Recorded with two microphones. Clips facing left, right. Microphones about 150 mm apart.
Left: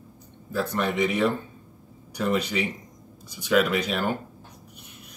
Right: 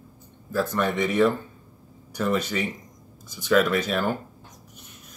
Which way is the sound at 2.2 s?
15° left (ahead or behind).